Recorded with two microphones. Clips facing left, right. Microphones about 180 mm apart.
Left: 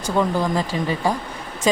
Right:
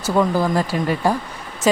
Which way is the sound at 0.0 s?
5° right (ahead or behind).